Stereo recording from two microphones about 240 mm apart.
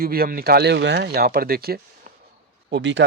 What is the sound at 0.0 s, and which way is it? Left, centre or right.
Speech, right.